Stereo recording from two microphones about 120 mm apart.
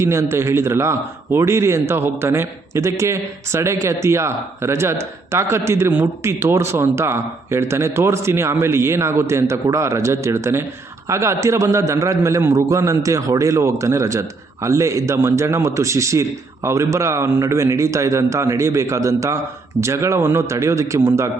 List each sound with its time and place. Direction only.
0.0 s a man's voice: 25° right (ahead or behind)